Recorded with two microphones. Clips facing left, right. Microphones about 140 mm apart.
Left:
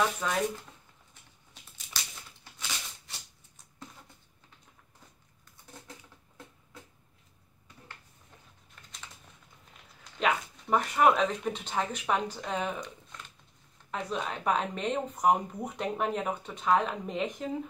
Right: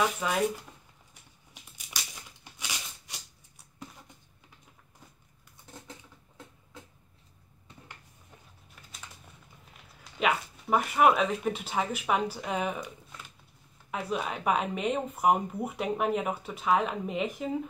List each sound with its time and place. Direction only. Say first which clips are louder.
0.0 s speech: right 1 dB; 10° right (ahead or behind)
1.5 s a sound: even; 10° right (ahead or behind)
8.8 s typing: right 1 dB; 5° right (ahead or behind)
10.1 s speech: right 1 dB; 5° right (ahead or behind)